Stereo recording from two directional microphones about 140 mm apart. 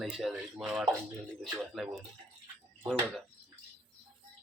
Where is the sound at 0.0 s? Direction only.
Centre (ahead or behind).